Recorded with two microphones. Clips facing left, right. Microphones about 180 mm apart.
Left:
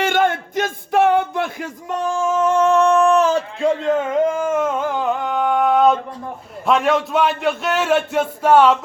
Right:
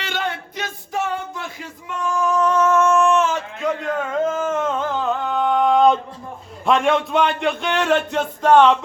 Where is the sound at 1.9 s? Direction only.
30° left (ahead or behind); by 6.0 s 5° left (ahead or behind).